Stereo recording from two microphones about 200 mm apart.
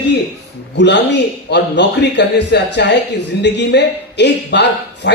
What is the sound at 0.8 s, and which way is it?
A man's voice, 60° left (ahead or behind).